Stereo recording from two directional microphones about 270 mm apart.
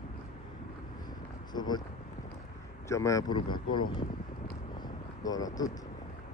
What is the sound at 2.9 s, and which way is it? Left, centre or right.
Speech, centre.